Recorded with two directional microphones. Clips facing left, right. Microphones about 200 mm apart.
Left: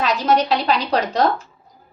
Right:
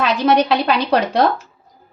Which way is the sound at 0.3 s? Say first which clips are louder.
Right 3 dB; 65° right (ahead or behind).